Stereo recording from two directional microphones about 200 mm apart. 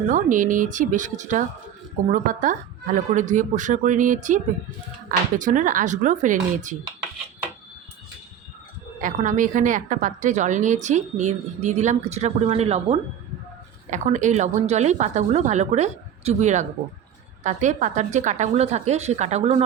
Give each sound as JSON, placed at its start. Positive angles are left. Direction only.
{"t": 0.1, "sound": "a woman's voice", "side_deg": -40}
{"t": 5.4, "sound": "a woman's voice", "side_deg": -40}
{"t": 9.0, "sound": "a woman's voice", "side_deg": -40}